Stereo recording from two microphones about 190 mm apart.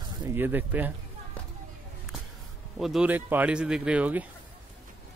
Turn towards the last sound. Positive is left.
turn(degrees=-10)  # may be behind; listen again after turning